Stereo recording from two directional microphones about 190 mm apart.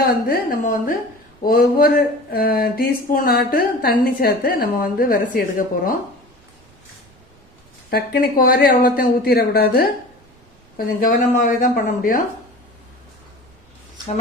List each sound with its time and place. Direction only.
0.0 s speech: 50° left (ahead or behind)
7.9 s speech: 50° left (ahead or behind)
11.0 s speech: 45° left (ahead or behind)